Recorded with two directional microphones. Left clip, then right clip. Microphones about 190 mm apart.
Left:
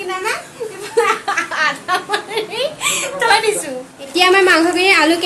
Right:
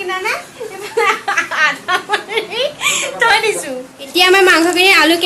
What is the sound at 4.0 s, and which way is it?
A woman's voice, centre (ahead or behind).